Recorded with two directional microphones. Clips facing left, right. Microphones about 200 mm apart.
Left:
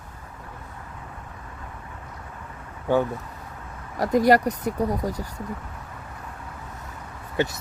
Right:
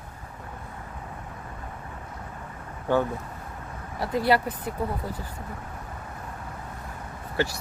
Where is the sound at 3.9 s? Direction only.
40° left (ahead or behind).